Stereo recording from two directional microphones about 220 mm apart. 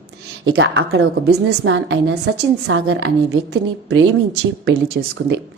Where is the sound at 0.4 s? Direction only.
60° right (ahead or behind).